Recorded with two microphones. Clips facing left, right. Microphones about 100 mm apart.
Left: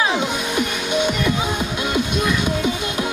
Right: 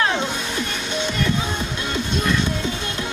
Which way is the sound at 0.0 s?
10° left (ahead or behind).